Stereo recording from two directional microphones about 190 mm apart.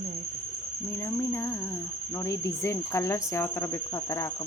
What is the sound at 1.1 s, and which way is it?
Speech, 15° left (ahead or behind).